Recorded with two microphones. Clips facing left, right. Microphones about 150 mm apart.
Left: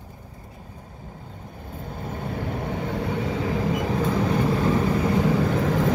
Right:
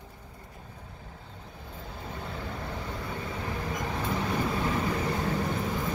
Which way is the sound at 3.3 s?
90° left.